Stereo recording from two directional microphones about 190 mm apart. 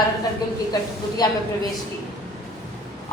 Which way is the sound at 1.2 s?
20° left (ahead or behind).